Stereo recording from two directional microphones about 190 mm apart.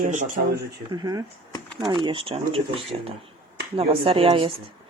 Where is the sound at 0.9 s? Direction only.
20° right (ahead or behind).